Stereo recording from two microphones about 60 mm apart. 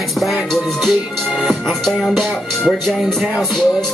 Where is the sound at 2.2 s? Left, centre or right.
Centre.